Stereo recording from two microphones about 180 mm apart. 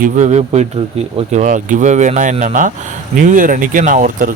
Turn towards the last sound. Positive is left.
turn(degrees=-45)  # may be behind; listen again after turning